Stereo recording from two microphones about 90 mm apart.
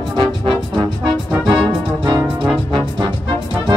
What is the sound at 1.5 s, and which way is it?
Music, 60° right (ahead or behind).